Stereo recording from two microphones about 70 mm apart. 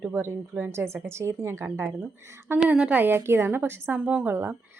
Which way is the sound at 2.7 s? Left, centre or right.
Right.